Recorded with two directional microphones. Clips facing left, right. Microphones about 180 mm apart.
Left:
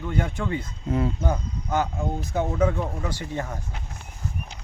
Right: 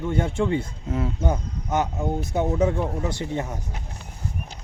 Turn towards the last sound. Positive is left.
turn(degrees=-20)  # may be behind; listen again after turning